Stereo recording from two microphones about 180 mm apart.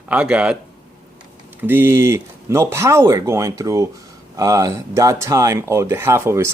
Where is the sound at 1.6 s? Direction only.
10° right (ahead or behind).